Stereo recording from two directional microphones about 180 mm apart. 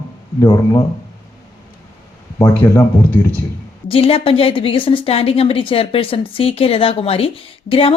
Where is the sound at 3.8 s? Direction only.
30° left (ahead or behind).